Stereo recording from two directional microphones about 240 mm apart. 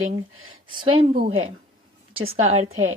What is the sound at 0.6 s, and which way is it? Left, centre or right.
Speech, right.